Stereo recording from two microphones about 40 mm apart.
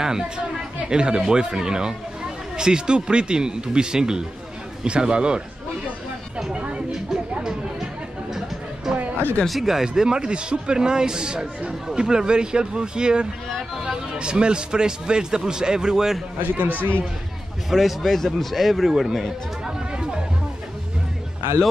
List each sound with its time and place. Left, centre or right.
0.0 s a man's voice: centre
6.5 s speech: right
8.3 s chatter: centre
9.5 s a man's voice: centre
16.5 s a man's voice: right
17.6 s a man's voice: centre
19.6 s chatter: centre